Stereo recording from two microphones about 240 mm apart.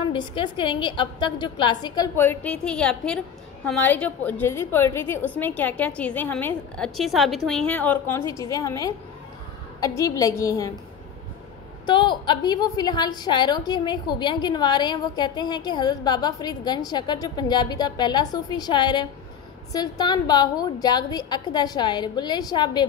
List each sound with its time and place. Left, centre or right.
0.1 s a woman's voice: centre
11.8 s a woman's voice: centre